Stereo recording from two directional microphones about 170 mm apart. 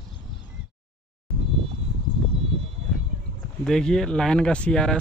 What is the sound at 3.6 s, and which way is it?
Speech, 5° left (ahead or behind).